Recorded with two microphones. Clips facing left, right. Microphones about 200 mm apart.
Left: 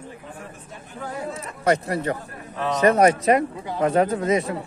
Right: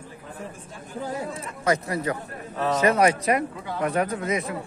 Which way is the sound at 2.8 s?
45° left (ahead or behind).